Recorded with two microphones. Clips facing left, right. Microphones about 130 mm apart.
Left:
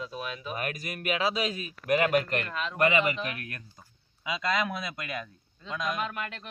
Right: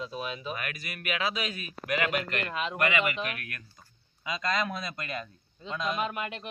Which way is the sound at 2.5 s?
15° right (ahead or behind).